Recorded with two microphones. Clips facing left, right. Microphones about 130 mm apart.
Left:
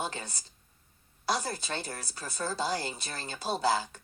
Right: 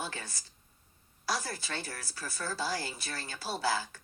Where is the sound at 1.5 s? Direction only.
25° left (ahead or behind).